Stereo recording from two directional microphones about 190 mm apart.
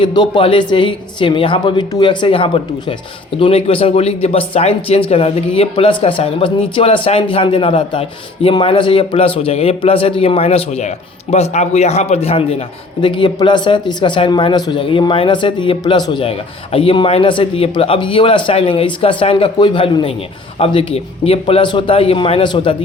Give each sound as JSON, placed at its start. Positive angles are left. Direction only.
{"t": 0.0, "sound": "speech", "side_deg": 25}